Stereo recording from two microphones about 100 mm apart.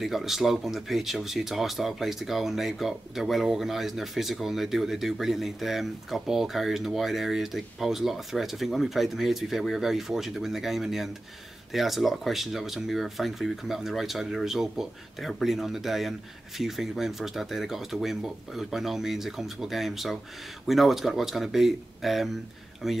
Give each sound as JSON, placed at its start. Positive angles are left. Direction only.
{"t": 0.0, "sound": "speech", "side_deg": -5}